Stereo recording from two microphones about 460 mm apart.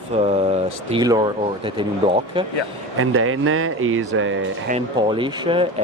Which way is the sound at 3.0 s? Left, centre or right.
Right.